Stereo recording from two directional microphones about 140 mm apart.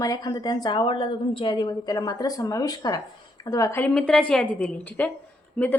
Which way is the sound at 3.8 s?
5° left (ahead or behind).